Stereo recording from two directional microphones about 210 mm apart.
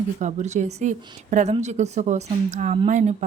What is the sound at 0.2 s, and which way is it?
Speech, 35° right (ahead or behind).